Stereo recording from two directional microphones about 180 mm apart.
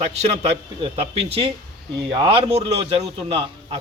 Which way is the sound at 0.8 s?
30° right (ahead or behind).